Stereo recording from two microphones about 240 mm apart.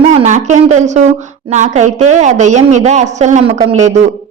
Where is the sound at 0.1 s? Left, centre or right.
Right.